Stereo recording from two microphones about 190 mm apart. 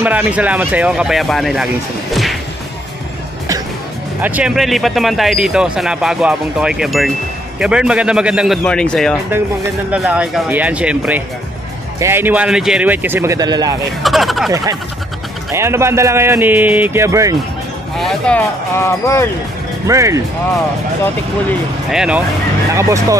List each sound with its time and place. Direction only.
0.0 s a man's voice: 10° right (ahead or behind)
4.2 s a man's voice: 5° right (ahead or behind)
14.0 s a sound: centre (ahead or behind)
14.5 s a man's voice: 20° right (ahead or behind)
17.9 s speech: 5° left (ahead or behind)
19.9 s a man's voice: 15° right (ahead or behind)
21.9 s speech: 5° right (ahead or behind)
22.7 s a man's voice: 15° right (ahead or behind)